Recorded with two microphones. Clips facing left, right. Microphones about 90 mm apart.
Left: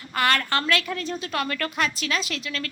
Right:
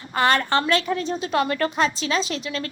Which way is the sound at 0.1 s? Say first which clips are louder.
Right 3 dB; 25° right (ahead or behind).